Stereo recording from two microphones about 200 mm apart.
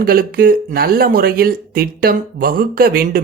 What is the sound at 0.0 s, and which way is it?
Speech, 45° right (ahead or behind).